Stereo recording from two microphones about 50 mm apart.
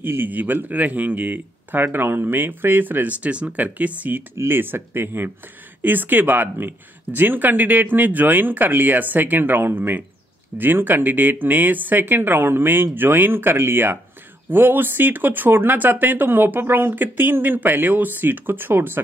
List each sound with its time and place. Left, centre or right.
0.0 s speech: right
4.4 s speech: right